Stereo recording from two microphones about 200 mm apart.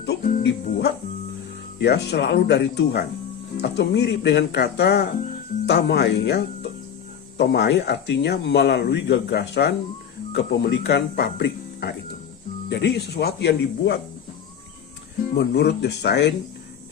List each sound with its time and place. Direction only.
0.0 s music: 50° left (ahead or behind)
1.8 s speech: 55° left (ahead or behind)
15.3 s speech: 55° left (ahead or behind)